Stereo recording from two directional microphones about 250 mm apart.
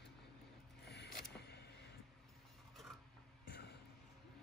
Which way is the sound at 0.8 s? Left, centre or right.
Left.